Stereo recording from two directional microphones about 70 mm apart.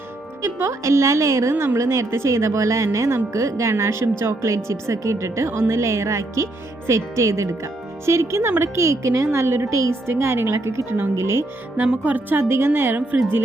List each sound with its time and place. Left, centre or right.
0.4 s a woman's voice: right
11.8 s speech: right